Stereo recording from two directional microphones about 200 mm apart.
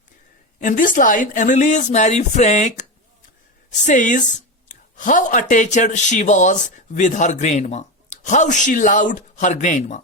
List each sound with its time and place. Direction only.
0.6 s speech: 40° left (ahead or behind)